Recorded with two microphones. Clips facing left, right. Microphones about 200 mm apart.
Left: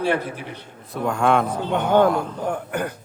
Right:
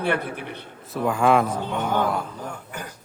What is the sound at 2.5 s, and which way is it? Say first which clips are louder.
Speech: left 10 dB; 60° left (ahead or behind).